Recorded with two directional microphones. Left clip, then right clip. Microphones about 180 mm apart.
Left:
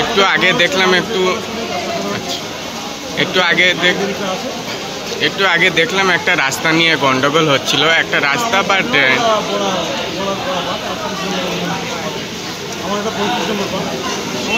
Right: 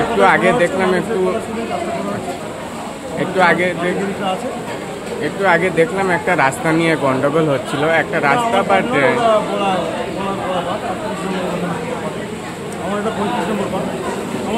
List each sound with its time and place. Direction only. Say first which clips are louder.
0.2 s speech: even; centre (ahead or behind)
3.2 s speech: left 1 dB; centre (ahead or behind)
5.2 s speech: left 2 dB; 5° left (ahead or behind)